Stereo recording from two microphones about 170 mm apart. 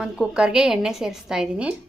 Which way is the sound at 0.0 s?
5° right (ahead or behind).